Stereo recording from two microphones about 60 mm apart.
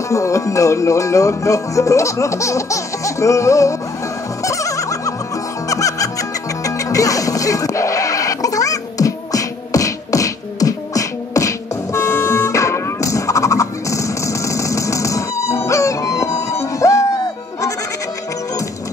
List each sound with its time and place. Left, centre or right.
0.1 s music: left